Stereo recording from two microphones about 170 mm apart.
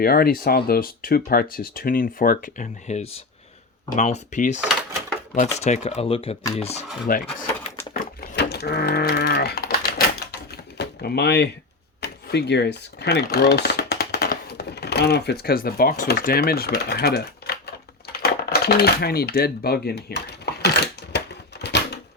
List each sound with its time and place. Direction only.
0.0 s speech: 60° left (ahead or behind); by 6.8 s 35° left (ahead or behind)
7.1 s speech: 60° left (ahead or behind)
7.9 s sheep: 60° left (ahead or behind)
10.5 s typewriter: 70° left (ahead or behind)
11.9 s speech: 75° left (ahead or behind)
18.2 s typewriter: 70° left (ahead or behind)